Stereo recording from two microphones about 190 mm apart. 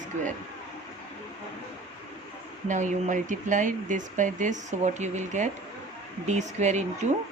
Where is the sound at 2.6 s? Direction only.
40° right (ahead or behind).